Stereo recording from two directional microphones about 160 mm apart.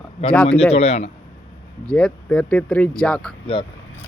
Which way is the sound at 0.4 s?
40° left (ahead or behind).